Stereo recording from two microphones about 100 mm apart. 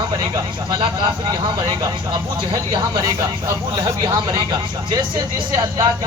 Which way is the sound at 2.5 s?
40° right (ahead or behind).